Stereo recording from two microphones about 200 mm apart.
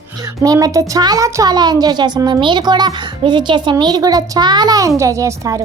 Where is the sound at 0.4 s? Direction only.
15° right (ahead or behind).